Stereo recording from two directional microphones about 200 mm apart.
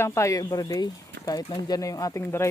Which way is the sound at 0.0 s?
15° left (ahead or behind).